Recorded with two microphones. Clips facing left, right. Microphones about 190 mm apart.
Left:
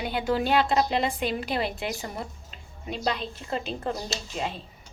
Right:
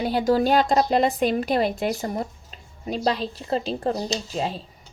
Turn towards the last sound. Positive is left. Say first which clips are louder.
# right 5 dB
turn(degrees=-35)  # may be behind; listen again after turning